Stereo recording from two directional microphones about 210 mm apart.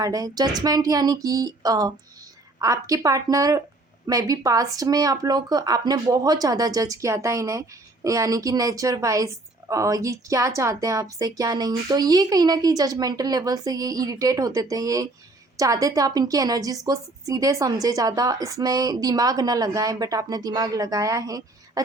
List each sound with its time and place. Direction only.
0.0 s speech: 15° right (ahead or behind)